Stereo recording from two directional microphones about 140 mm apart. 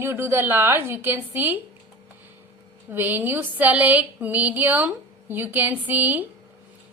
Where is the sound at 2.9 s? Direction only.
15° right (ahead or behind).